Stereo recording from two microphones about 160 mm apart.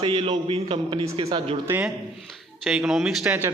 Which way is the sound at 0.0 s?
30° right (ahead or behind).